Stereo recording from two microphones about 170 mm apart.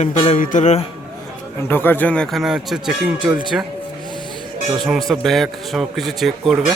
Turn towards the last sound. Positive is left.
turn(degrees=0)  # may be behind; listen again after turning